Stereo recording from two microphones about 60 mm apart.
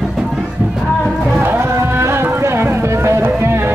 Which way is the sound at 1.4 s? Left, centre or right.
Right.